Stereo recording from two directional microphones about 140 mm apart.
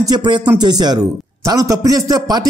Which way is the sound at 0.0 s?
30° right (ahead or behind).